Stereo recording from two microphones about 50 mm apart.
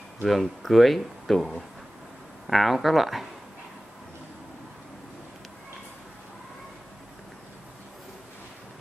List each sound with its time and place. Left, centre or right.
0.2 s speech: centre